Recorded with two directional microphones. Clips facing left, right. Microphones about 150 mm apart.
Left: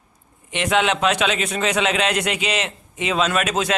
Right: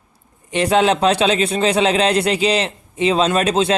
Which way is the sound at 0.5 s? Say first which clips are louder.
Right 5 dB; 35° right (ahead or behind).